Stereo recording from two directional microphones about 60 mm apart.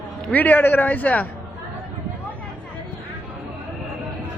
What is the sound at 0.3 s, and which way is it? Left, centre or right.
A man's voice, left.